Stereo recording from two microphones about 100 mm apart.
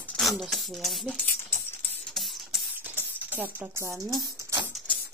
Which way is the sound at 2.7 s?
20° right (ahead or behind).